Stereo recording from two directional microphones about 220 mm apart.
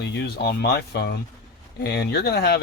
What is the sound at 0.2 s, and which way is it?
Speech, 45° left (ahead or behind).